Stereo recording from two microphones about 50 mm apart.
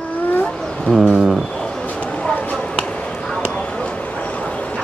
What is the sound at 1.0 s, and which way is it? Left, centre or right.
Speech, centre.